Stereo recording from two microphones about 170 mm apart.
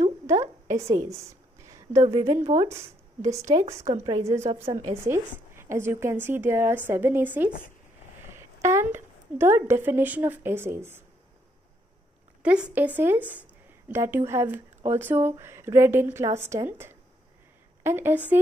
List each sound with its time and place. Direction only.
0.7 s a woman's voice: 35° right (ahead or behind)
0.9 s a woman's voice: 20° right (ahead or behind)
3.8 s a woman's voice: 35° right (ahead or behind)
5.0 s a woman's voice: 15° right (ahead or behind)
12.4 s a woman's voice: 5° right (ahead or behind)